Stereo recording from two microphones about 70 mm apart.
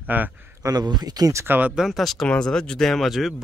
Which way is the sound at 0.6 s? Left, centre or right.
Right.